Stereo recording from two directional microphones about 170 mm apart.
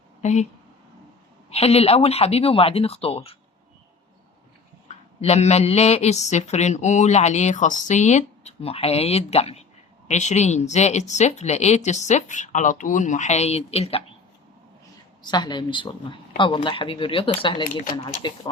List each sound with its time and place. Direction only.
0.2 s speech: 40° left (ahead or behind)
1.5 s speech: 35° left (ahead or behind)
5.2 s speech: 40° left (ahead or behind)
15.2 s speech: 25° left (ahead or behind)